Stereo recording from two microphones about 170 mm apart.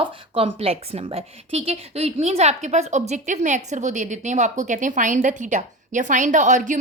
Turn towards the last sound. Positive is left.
turn(degrees=-45)  # may be behind; listen again after turning